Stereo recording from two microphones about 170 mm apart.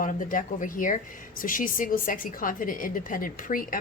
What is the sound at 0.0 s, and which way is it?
A woman's voice, 50° left (ahead or behind).